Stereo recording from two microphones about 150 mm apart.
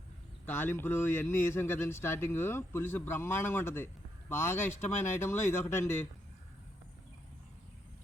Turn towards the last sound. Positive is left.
turn(degrees=15)  # may be behind; listen again after turning